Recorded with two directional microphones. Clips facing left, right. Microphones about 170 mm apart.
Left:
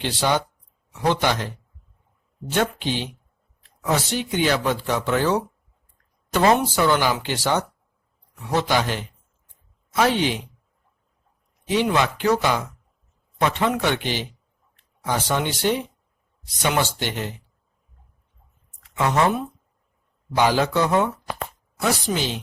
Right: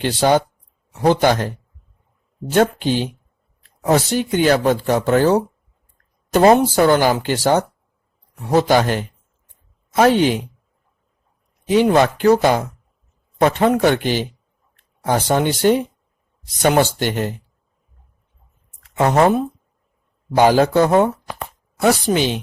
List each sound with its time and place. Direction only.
0.0 s speech: 45° right (ahead or behind)
11.7 s speech: 45° right (ahead or behind)
18.8 s speech: 45° right (ahead or behind)
21.8 s speech: 60° right (ahead or behind)